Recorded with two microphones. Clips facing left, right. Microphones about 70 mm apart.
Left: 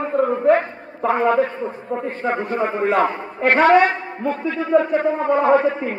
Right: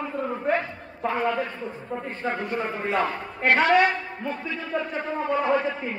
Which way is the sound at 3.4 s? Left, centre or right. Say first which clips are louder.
Left 6 dB; left.